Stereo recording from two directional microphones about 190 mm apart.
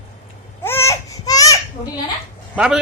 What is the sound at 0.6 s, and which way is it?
Baby cry, 15° left (ahead or behind).